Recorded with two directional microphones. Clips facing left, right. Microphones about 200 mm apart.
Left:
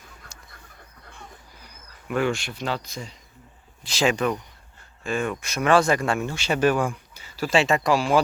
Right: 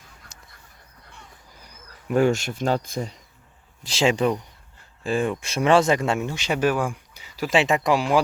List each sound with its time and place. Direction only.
2.0 s speech: 40° right (ahead or behind)
3.8 s speech: 25° right (ahead or behind)